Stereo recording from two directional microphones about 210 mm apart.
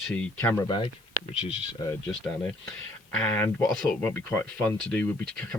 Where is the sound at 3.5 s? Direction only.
10° left (ahead or behind).